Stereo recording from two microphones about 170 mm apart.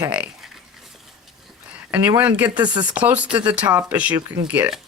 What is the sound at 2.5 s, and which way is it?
Speech, 25° right (ahead or behind).